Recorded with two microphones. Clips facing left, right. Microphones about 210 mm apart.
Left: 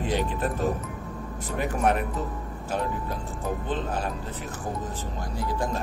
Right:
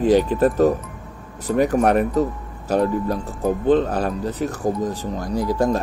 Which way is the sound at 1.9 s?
40° right (ahead or behind).